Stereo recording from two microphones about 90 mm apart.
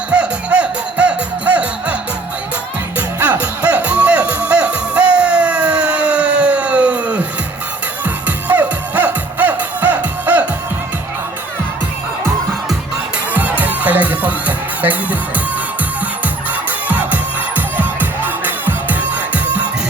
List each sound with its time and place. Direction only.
0.1 s music: 10° right (ahead or behind)
3.2 s music: 15° right (ahead or behind)
13.3 s music: 15° right (ahead or behind)
16.9 s music: 15° right (ahead or behind)